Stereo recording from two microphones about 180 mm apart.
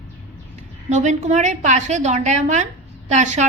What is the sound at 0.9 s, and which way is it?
A woman's voice, 40° right (ahead or behind).